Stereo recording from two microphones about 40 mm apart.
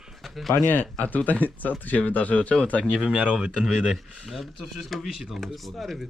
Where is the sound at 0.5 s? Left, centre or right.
Left.